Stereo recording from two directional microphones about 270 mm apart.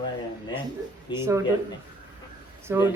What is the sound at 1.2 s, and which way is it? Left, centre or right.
Speech, centre.